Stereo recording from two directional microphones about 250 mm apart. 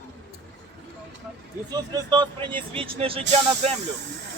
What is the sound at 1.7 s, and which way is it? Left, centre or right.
A man's voice, centre.